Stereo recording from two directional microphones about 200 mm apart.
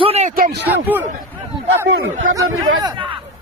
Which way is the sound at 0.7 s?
10° right (ahead or behind).